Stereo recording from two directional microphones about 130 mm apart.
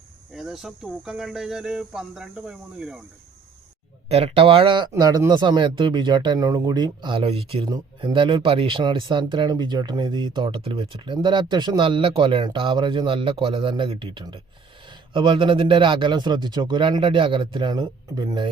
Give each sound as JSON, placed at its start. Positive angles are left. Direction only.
{"t": 0.3, "sound": "speech", "side_deg": -5}
{"t": 4.1, "sound": "speech", "side_deg": -50}
{"t": 4.9, "sound": "speech", "side_deg": -30}
{"t": 7.7, "sound": "speech", "side_deg": -35}